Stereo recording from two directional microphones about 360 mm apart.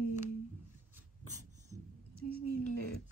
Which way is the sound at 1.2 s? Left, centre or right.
Right.